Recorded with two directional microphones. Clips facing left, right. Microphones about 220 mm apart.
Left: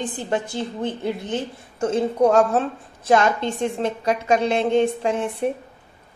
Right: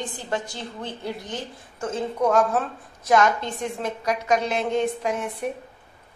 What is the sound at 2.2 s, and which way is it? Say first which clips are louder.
A woman's voice: left 3 dB; 30° left (ahead or behind).